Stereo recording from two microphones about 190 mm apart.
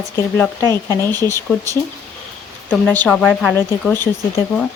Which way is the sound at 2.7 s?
5° left (ahead or behind).